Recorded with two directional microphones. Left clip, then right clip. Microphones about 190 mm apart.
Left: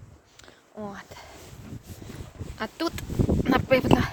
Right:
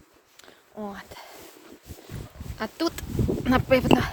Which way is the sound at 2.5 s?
10° right (ahead or behind).